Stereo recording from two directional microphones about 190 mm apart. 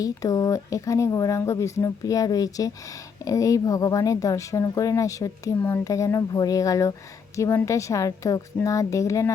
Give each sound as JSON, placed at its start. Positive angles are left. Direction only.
{"t": 0.0, "sound": "speech", "side_deg": 20}